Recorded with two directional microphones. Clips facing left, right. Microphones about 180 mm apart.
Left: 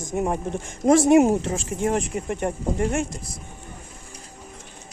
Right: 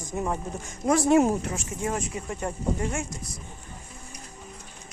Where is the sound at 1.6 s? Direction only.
90° left.